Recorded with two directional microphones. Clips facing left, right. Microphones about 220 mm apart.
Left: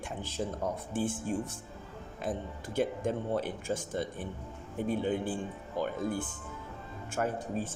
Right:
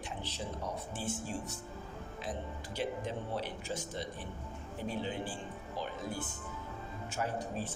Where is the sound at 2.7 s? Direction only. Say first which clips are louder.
Left 7 dB; 50° left (ahead or behind).